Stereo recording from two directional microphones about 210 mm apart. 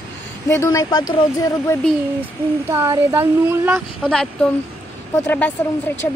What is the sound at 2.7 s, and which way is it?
Speech, 15° right (ahead or behind).